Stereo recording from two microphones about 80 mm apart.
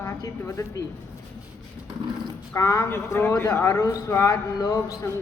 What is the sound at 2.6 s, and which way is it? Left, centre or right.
A man's voice, left.